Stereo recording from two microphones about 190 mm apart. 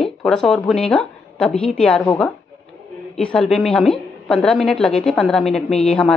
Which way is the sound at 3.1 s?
5° left (ahead or behind).